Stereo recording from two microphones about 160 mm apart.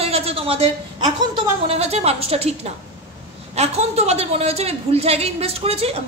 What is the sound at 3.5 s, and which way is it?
A woman's voice, 45° right (ahead or behind).